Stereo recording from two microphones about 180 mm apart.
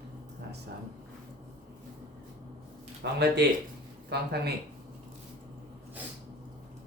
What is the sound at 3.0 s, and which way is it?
Speech, 70° right (ahead or behind).